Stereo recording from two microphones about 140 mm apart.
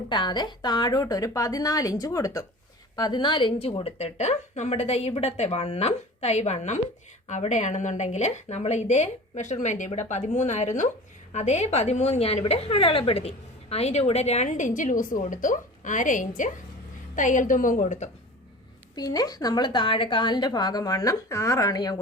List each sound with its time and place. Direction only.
0.1 s a woman's voice: 30° left (ahead or behind); by 18.1 s 60° left (ahead or behind)
18.9 s a woman's voice: 25° left (ahead or behind)